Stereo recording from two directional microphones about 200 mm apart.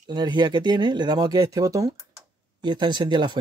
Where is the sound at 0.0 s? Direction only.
20° right (ahead or behind).